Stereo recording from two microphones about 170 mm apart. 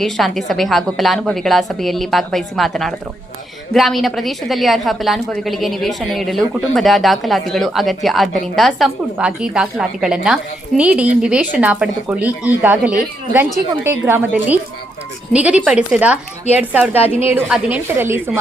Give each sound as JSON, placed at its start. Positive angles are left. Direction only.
{"t": 0.0, "sound": "a woman's voice", "side_deg": 0}